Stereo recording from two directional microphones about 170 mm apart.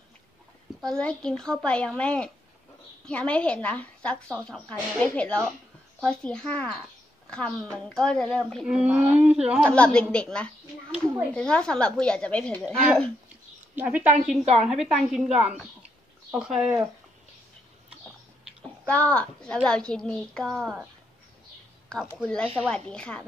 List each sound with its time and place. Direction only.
0.7 s a woman's voice: 5° left (ahead or behind)
9.7 s speech: 5° left (ahead or behind)
13.7 s speech: 10° right (ahead or behind)
14.4 s a woman's voice: 40° right (ahead or behind)
14.7 s a woman's voice: centre (ahead or behind)
18.9 s a woman's voice: 10° left (ahead or behind)
22.0 s a woman's voice: 5° left (ahead or behind)